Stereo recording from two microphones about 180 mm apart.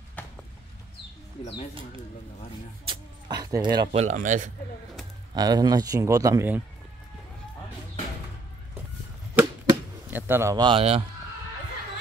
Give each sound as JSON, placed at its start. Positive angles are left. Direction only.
{"t": 1.4, "sound": "speech", "side_deg": 30}
{"t": 2.9, "sound": "a sound", "side_deg": -25}
{"t": 4.0, "sound": "speech", "side_deg": -45}
{"t": 5.3, "sound": "speech", "side_deg": -20}
{"t": 9.3, "sound": "arrow", "side_deg": -10}